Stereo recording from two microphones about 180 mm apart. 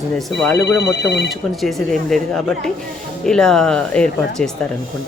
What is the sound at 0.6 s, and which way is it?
Speech, 70° left (ahead or behind).